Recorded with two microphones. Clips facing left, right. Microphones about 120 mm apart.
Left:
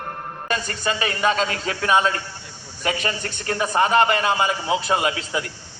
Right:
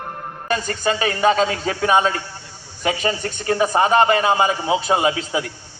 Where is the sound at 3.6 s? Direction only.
25° right (ahead or behind).